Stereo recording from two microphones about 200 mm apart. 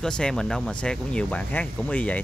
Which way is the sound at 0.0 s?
5° left (ahead or behind).